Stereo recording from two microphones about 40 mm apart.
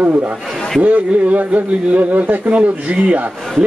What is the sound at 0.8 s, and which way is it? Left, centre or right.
Speech, right.